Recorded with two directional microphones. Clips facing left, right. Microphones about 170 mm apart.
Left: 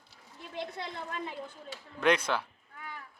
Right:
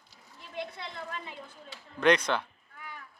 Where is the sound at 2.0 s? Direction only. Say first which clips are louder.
Right 3 dB; 5° left (ahead or behind).